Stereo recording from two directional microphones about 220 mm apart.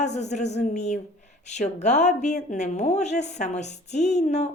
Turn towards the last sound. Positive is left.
turn(degrees=30)  # may be behind; listen again after turning